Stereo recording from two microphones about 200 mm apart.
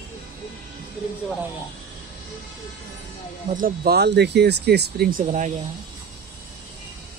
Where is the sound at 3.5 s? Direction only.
45° right (ahead or behind).